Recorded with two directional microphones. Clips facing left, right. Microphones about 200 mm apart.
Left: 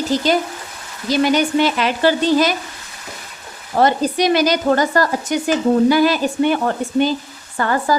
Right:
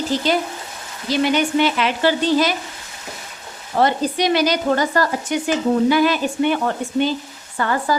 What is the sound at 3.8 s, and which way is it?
Speech, 45° left (ahead or behind).